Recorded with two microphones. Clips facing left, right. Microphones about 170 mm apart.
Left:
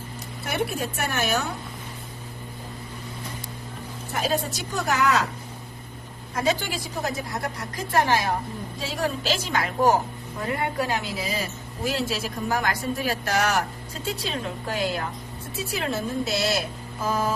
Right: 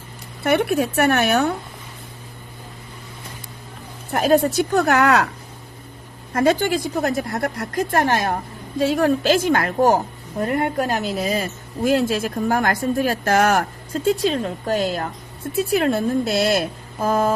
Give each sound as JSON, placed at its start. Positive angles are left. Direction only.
{"t": 0.4, "sound": "a woman's voice", "side_deg": -65}
{"t": 4.1, "sound": "a woman's voice", "side_deg": -55}
{"t": 6.3, "sound": "a woman's voice", "side_deg": -55}
{"t": 15.7, "sound": "a woman's voice", "side_deg": -55}